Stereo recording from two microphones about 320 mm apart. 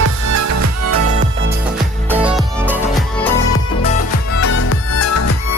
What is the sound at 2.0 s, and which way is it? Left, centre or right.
Music, centre.